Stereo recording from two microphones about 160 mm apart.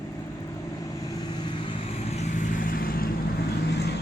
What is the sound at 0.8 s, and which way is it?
Vehicle, 20° left (ahead or behind).